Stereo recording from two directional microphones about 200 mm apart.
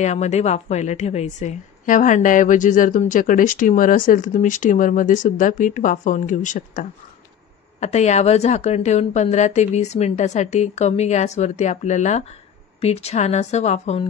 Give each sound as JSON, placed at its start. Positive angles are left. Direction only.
{"t": 0.0, "sound": "a woman's voice", "side_deg": 35}